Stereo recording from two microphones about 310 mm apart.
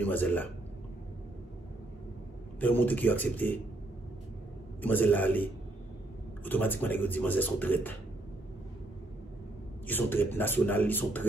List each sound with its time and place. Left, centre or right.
0.0 s speech: centre
2.6 s speech: centre
4.8 s speech: centre
9.8 s a man's voice: centre